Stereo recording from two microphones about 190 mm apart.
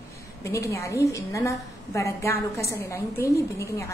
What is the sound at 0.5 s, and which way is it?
A woman's voice, 15° left (ahead or behind).